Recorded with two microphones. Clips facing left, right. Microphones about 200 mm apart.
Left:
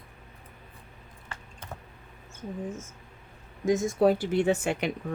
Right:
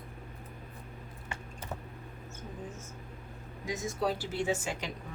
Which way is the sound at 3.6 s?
50° left (ahead or behind).